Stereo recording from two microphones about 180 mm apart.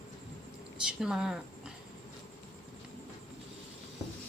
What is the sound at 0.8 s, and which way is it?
Speech, 5° right (ahead or behind).